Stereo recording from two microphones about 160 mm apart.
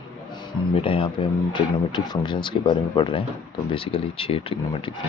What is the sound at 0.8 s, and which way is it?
Speech, 35° left (ahead or behind).